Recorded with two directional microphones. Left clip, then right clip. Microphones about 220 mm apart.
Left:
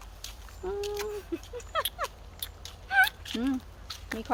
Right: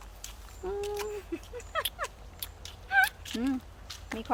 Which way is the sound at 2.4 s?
10° right (ahead or behind).